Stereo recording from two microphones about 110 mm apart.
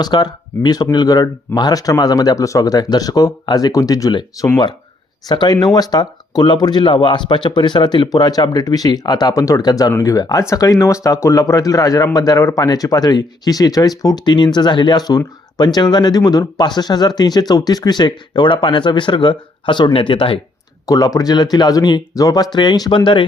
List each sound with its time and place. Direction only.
0.0 s speech: 40° left (ahead or behind)
20.8 s speech: 30° left (ahead or behind); by 23.2 s 50° left (ahead or behind)